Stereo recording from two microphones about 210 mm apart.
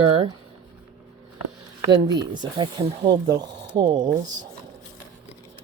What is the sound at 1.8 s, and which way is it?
Speech, 20° right (ahead or behind).